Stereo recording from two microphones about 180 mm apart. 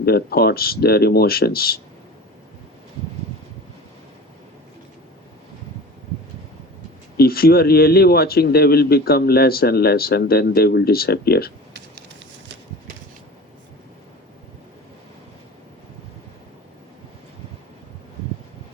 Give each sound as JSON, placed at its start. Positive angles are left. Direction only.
{"t": 0.0, "sound": "a man's voice", "side_deg": 60}
{"t": 7.2, "sound": "a man's voice", "side_deg": 55}